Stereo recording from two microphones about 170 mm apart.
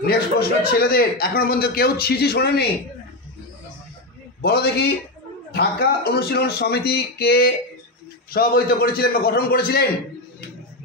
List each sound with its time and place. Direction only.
0.0 s a man's voice: 65° left (ahead or behind)
4.4 s a man's voice: 65° left (ahead or behind)